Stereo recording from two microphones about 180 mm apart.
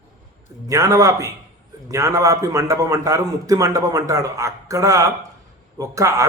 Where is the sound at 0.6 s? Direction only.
15° right (ahead or behind).